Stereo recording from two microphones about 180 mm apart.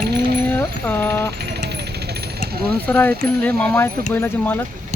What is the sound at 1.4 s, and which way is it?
Vehicle, 65° right (ahead or behind).